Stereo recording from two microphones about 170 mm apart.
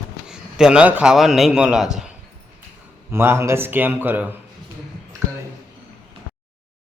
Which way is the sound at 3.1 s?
15° right (ahead or behind).